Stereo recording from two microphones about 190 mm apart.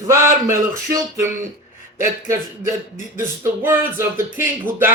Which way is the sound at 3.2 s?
10° right (ahead or behind).